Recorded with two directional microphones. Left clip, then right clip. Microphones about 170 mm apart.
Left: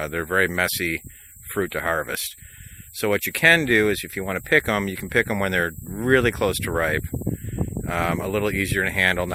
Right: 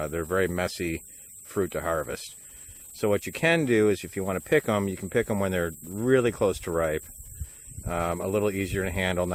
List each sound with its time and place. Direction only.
0.0 s speech: 20° left (ahead or behind)
6.1 s speech: 15° left (ahead or behind)